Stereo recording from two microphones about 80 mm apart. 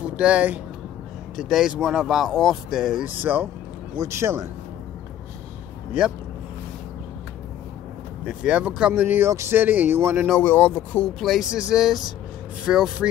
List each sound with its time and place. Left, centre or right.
0.1 s speech: centre
1.3 s speech: centre
3.2 s speech: right
3.9 s a man's voice: right
8.3 s speech: centre
8.9 s speech: right
10.4 s speech: centre
11.1 s speech: centre